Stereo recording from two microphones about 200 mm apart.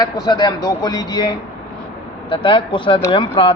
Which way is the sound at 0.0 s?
20° left (ahead or behind).